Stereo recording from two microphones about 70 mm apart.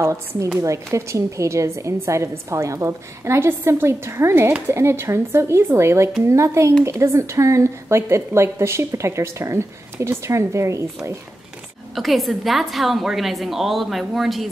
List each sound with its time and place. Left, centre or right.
0.0 s a woman's voice: right
11.9 s a woman's voice: centre